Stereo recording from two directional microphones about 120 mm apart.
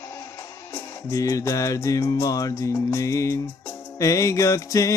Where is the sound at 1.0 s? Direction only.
30° left (ahead or behind).